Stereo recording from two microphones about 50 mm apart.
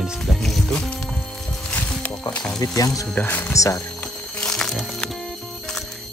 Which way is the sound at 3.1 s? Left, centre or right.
Left.